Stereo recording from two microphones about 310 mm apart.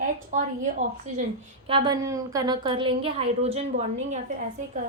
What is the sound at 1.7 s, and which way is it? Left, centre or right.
A woman's voice, centre.